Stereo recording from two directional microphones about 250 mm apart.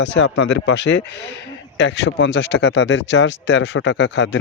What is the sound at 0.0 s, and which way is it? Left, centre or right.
Speech, left.